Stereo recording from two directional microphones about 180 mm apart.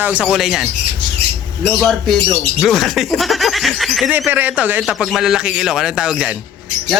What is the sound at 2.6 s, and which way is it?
Speech, centre (ahead or behind).